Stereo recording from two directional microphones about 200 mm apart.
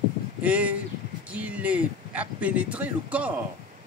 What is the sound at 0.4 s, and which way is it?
Speech, 5° right (ahead or behind).